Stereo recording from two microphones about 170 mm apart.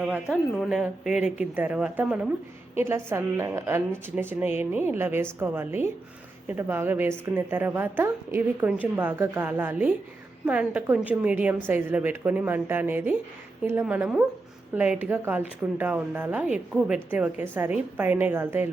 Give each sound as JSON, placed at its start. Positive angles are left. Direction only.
{"t": 0.0, "sound": "a woman's voice", "side_deg": -5}